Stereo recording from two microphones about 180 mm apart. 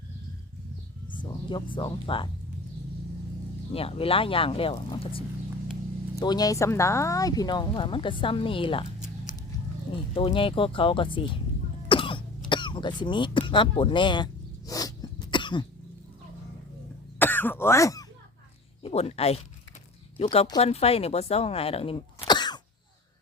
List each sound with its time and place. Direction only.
1.1 s speech: 25° left (ahead or behind)
3.7 s speech: 30° left (ahead or behind)
10.2 s speech: 30° left (ahead or behind)
11.9 s throat clearing: 30° left (ahead or behind)
13.5 s speech: 30° left (ahead or behind)
14.7 s cough: 20° left (ahead or behind)
17.2 s speech: 10° left (ahead or behind)
18.8 s speech: 35° left (ahead or behind)